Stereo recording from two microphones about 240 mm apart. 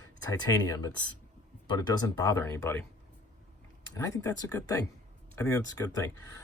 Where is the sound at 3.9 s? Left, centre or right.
Centre.